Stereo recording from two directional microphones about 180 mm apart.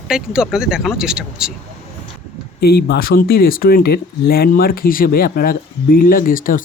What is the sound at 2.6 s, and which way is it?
Speech, 60° left (ahead or behind).